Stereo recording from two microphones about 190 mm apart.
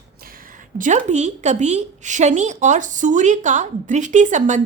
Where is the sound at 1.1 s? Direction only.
40° right (ahead or behind).